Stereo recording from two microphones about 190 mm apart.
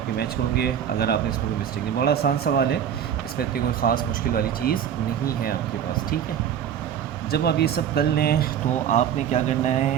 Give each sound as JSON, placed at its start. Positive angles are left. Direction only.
{"t": 0.2, "sound": "speech", "side_deg": 55}
{"t": 7.3, "sound": "speech", "side_deg": 55}
{"t": 8.9, "sound": "speech", "side_deg": 40}